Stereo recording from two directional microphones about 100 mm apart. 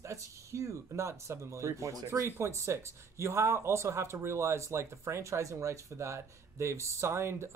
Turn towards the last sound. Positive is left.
turn(degrees=-25)  # may be behind; listen again after turning